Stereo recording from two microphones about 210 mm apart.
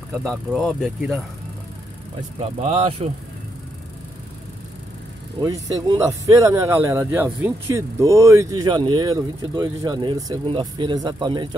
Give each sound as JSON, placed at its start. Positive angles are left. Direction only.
{"t": 0.1, "sound": "speech", "side_deg": 0}
{"t": 2.6, "sound": "speech", "side_deg": -25}
{"t": 5.4, "sound": "speech", "side_deg": -15}